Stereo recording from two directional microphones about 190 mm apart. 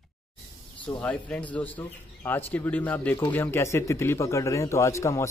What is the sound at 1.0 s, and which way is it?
A man's voice, 5° left (ahead or behind).